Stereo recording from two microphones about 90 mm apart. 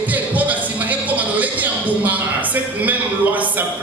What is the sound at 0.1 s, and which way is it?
Music, 20° right (ahead or behind).